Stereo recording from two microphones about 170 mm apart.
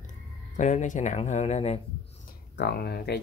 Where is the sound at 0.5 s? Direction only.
45° left (ahead or behind).